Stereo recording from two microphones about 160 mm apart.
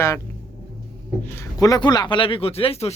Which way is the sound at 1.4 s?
25° left (ahead or behind).